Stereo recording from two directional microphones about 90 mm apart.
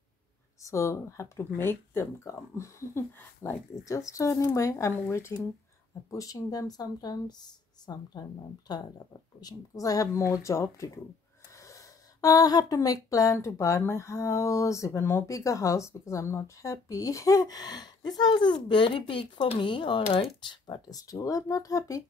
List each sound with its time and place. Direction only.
0.6 s speech: 35° left (ahead or behind); by 21.0 s 55° left (ahead or behind)
21.1 s speech: 40° left (ahead or behind)